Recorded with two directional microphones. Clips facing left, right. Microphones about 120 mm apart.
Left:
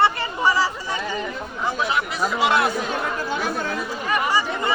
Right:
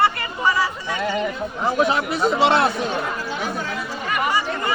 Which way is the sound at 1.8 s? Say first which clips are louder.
Right 3 dB; 25° right (ahead or behind).